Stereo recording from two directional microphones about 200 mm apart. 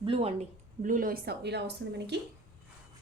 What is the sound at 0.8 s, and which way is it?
A woman's voice, 45° right (ahead or behind).